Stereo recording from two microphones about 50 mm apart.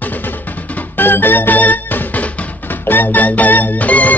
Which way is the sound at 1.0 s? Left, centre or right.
Left.